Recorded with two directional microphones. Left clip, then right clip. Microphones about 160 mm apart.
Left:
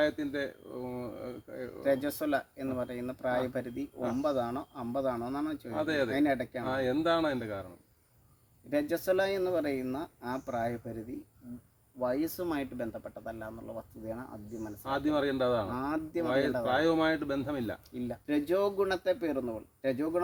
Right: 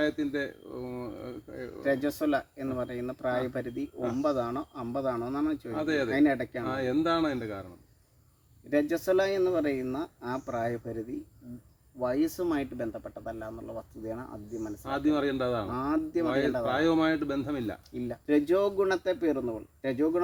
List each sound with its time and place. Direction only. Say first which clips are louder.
0.0 s speech: right 1 dB; 15° right (ahead or behind)
1.8 s speech: right 2 dB; 20° left (ahead or behind)
5.7 s speech: left 1 dB; 10° right (ahead or behind)
6.1 s speech: right 3 dB; 20° left (ahead or behind)
6.7 s speech: right 1 dB; 10° right (ahead or behind)
8.7 s speech: right 3 dB; 20° left (ahead or behind)
11.9 s speech: right 3 dB; 20° left (ahead or behind)
14.8 s speech: right 2 dB; 10° right (ahead or behind)
15.7 s speech: right 4 dB; 20° left (ahead or behind)
16.6 s speech: right 1 dB; 10° right (ahead or behind)
18.1 s speech: right 5 dB; 20° left (ahead or behind)